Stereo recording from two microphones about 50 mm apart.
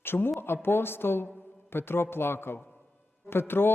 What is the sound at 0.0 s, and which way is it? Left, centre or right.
A man's voice, left.